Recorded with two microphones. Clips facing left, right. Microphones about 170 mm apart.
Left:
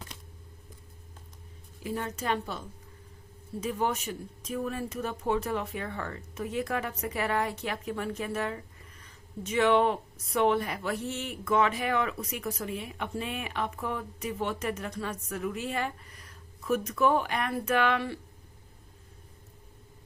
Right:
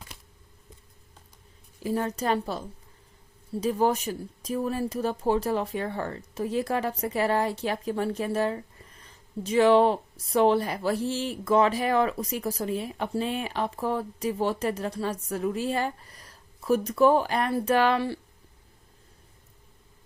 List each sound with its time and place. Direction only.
1.8 s speech: 35° right (ahead or behind)